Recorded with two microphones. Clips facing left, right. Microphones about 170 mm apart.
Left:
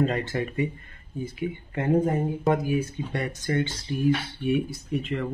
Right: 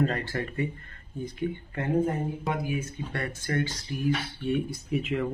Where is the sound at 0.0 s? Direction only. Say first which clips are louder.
Left 3 dB; 20° left (ahead or behind).